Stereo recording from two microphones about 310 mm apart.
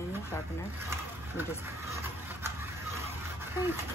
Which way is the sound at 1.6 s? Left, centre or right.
Centre.